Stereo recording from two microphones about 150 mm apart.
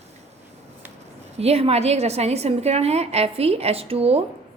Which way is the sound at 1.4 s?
45° right (ahead or behind).